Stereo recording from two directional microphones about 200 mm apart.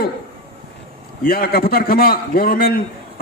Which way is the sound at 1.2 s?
50° left (ahead or behind).